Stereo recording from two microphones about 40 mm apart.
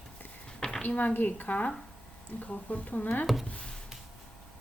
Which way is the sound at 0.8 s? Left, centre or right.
Left.